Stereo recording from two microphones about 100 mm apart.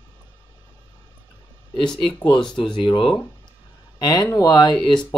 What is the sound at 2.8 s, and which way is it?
Speech, 55° left (ahead or behind).